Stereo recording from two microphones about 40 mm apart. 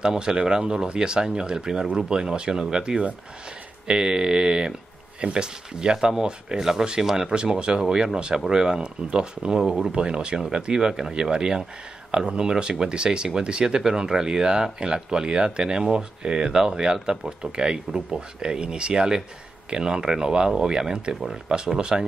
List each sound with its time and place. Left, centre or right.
0.0 s speech: centre
9.6 s speech: centre
9.9 s speech: right